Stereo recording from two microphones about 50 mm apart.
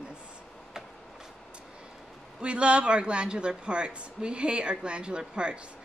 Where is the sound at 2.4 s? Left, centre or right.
Right.